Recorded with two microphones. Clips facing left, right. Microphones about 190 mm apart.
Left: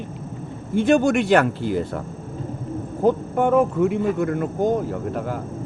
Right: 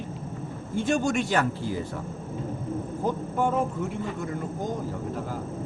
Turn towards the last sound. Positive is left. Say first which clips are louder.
# left 6 dB
turn(degrees=65)  # may be behind; listen again after turning